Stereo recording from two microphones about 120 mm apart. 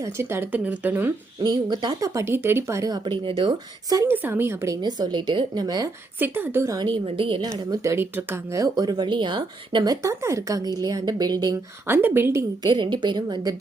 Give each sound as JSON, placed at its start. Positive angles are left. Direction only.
{"t": 0.0, "sound": "speech", "side_deg": -20}
{"t": 1.4, "sound": "speech", "side_deg": -35}
{"t": 4.1, "sound": "speech", "side_deg": -15}
{"t": 4.8, "sound": "speech", "side_deg": -35}
{"t": 6.1, "sound": "speech", "side_deg": -15}
{"t": 6.7, "sound": "a woman's voice", "side_deg": -45}
{"t": 7.7, "sound": "speech", "side_deg": -20}
{"t": 8.6, "sound": "speech", "side_deg": -30}
{"t": 11.9, "sound": "speech", "side_deg": -20}
{"t": 12.7, "sound": "speech", "side_deg": -40}